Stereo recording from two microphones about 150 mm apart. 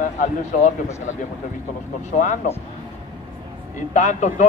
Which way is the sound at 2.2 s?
50° left (ahead or behind).